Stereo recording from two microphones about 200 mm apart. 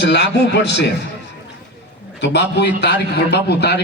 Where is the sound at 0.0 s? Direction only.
60° left (ahead or behind).